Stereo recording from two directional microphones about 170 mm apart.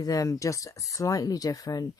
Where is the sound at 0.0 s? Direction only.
20° left (ahead or behind).